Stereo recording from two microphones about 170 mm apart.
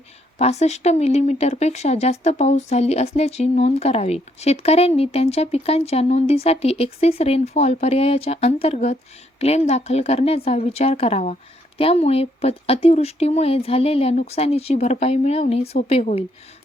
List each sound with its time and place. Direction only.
0.3 s speech: 40° left (ahead or behind)